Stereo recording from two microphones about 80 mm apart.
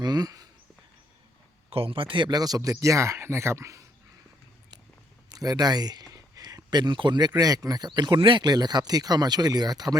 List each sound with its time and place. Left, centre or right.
0.0 s a sound: right
2.0 s speech: right
2.3 s speech: right
5.3 s speech: right